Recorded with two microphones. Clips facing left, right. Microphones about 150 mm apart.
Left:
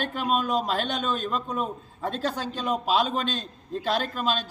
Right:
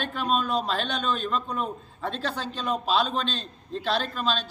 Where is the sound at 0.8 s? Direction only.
45° left (ahead or behind).